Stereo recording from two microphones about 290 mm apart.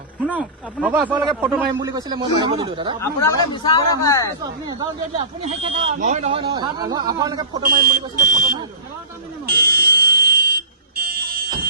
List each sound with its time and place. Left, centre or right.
0.2 s speech: centre
3.0 s speech: centre
4.6 s speech: centre
7.9 s speech: right
9.5 s a sound: right
10.9 s fire alarm: right